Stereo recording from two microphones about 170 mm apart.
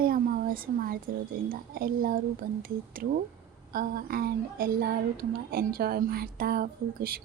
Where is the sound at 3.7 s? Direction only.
60° right (ahead or behind).